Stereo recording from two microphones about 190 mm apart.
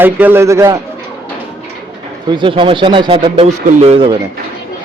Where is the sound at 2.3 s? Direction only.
25° right (ahead or behind).